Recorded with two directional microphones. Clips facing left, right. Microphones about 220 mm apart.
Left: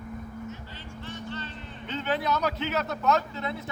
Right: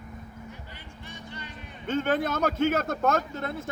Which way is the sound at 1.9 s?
50° right (ahead or behind).